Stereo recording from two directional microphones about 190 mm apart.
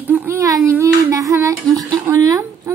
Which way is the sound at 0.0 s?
10° right (ahead or behind).